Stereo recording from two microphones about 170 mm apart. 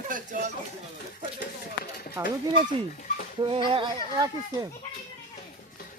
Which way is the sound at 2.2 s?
10° right (ahead or behind).